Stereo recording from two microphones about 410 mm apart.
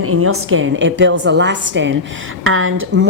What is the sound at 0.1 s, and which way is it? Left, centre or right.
A woman's voice, right.